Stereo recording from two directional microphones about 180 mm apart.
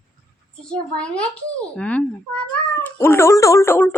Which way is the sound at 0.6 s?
5° left (ahead or behind).